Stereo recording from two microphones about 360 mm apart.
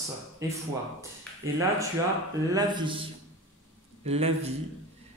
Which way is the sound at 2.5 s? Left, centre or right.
Centre.